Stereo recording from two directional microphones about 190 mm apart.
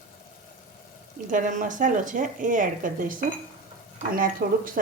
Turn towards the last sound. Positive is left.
turn(degrees=-45)  # may be behind; listen again after turning